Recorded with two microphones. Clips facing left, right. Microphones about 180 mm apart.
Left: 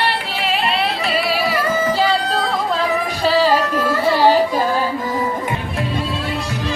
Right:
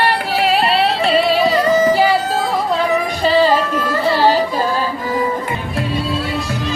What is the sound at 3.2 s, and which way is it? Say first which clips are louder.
Music: right 1 dB; centre (ahead or behind).